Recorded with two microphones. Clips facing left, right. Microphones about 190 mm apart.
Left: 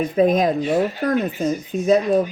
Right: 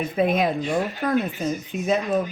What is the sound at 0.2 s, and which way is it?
Speech, 40° left (ahead or behind).